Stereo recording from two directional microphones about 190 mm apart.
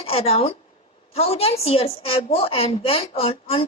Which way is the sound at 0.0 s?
30° left (ahead or behind).